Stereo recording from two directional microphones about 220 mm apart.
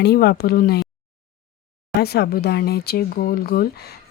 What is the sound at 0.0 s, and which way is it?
Speech, 45° left (ahead or behind).